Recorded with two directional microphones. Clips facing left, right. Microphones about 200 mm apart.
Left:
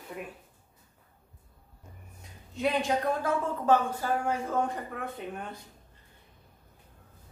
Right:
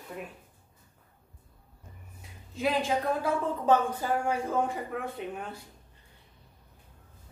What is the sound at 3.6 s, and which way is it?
Speech, 15° right (ahead or behind).